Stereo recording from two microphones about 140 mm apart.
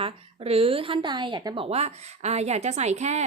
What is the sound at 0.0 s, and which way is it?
A woman's voice, 45° right (ahead or behind).